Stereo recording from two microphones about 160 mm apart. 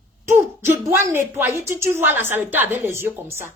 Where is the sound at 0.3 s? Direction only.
15° right (ahead or behind).